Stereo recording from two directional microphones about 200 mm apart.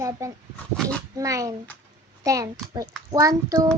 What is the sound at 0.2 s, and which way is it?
A child's voice, 15° right (ahead or behind).